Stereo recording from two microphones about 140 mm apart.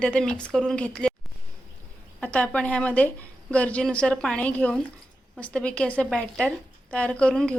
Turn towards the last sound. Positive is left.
turn(degrees=5)  # may be behind; listen again after turning